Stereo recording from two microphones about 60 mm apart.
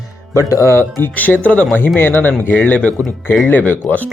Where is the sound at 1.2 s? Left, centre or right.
Left.